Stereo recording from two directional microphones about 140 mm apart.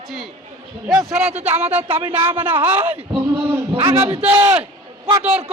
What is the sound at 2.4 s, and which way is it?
Speech, 15° right (ahead or behind).